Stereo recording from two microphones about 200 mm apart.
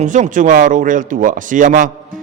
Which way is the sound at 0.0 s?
40° right (ahead or behind).